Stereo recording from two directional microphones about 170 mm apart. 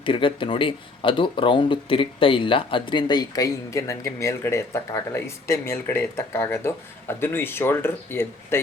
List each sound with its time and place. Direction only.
0.0 s speech: 30° left (ahead or behind); by 8.5 s 15° left (ahead or behind)